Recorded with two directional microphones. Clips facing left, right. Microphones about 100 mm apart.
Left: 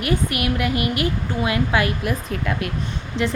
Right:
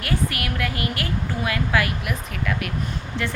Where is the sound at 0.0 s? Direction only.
20° left (ahead or behind).